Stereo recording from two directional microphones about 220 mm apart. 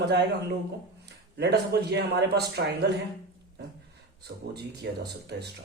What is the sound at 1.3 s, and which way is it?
Speech, 50° right (ahead or behind).